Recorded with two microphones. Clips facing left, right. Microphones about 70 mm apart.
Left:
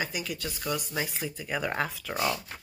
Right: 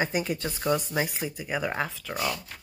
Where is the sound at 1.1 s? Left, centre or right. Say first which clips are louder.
Right 2 dB; centre.